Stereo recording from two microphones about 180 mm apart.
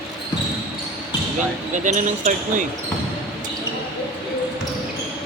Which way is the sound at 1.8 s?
45° right (ahead or behind).